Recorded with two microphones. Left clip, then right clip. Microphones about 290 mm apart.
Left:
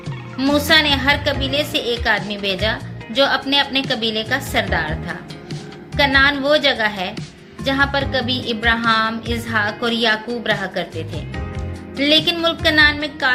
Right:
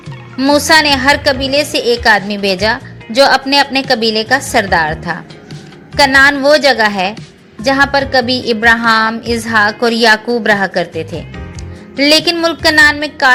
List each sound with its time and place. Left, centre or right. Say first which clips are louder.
0.3 s a woman's voice: right 6 dB; right